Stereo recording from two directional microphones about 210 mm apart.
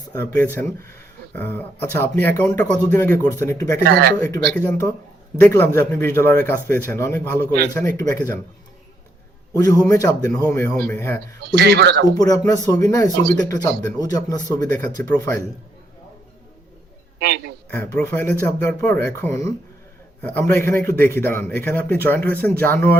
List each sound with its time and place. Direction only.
0.3 s speech: 10° left (ahead or behind)
3.8 s a man's voice: 50° right (ahead or behind)
4.2 s speech: 5° left (ahead or behind)
6.3 s a man's voice: 45° right (ahead or behind)
6.7 s speech: 10° left (ahead or behind)
9.5 s speech: 15° left (ahead or behind)
11.3 s a man's voice: 50° right (ahead or behind)
12.1 s speech: 15° left (ahead or behind)
17.2 s a man's voice: 50° right (ahead or behind)
17.7 s speech: 10° left (ahead or behind)